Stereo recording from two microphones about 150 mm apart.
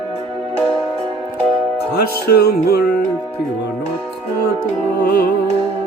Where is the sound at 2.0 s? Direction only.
90° left.